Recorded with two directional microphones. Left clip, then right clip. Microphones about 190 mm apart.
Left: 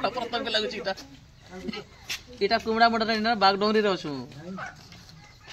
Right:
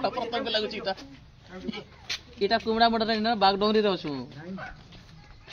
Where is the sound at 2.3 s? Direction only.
5° left (ahead or behind).